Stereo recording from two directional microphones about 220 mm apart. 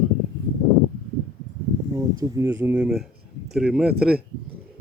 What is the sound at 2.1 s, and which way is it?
Speech, 10° right (ahead or behind).